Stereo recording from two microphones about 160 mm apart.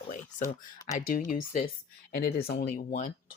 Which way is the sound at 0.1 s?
55° left (ahead or behind).